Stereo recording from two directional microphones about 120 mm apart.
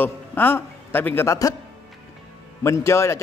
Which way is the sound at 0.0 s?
15° left (ahead or behind).